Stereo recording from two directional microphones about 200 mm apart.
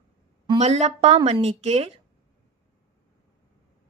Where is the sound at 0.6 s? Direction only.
35° right (ahead or behind).